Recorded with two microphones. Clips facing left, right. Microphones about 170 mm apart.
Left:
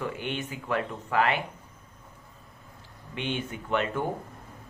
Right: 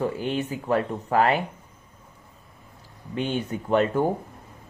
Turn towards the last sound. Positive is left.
turn(degrees=-40)  # may be behind; listen again after turning